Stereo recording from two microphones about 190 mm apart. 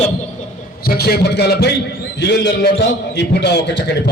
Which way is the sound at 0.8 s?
55° left (ahead or behind).